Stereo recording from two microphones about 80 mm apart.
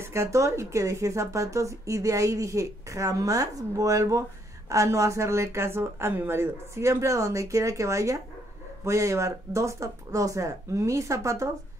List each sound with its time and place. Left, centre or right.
0.0 s speech: right